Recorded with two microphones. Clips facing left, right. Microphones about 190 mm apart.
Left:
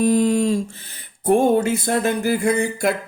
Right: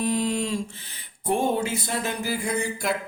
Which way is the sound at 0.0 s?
45° left (ahead or behind).